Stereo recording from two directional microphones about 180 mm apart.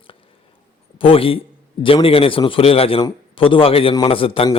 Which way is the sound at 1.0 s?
30° left (ahead or behind).